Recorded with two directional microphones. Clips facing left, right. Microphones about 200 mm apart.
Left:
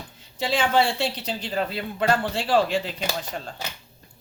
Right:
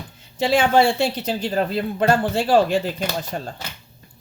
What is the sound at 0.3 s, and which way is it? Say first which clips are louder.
Speech: right 5 dB; 50° right (ahead or behind).